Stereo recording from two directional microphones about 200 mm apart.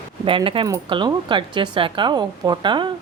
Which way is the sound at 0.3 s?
25° right (ahead or behind).